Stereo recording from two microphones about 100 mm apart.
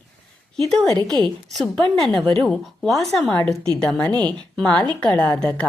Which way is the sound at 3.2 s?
15° left (ahead or behind).